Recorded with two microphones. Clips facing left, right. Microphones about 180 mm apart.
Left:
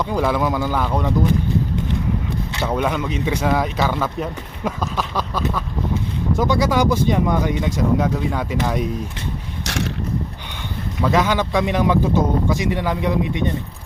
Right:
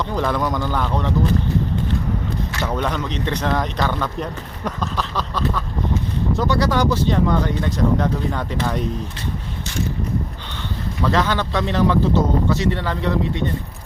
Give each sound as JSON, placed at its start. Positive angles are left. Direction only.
{"t": 0.0, "sound": "speech", "side_deg": 10}
{"t": 2.7, "sound": "speech", "side_deg": 10}
{"t": 9.6, "sound": "mechanisms", "side_deg": 80}
{"t": 11.0, "sound": "speech", "side_deg": 10}